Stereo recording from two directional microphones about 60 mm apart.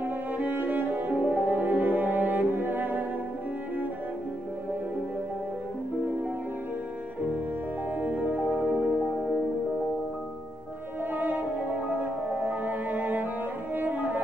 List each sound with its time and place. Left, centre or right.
0.4 s cello: right
8.0 s music: right
8.6 s music: centre
11.1 s music: right